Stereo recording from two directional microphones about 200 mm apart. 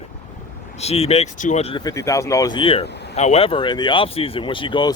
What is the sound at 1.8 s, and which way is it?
Speech, 15° left (ahead or behind).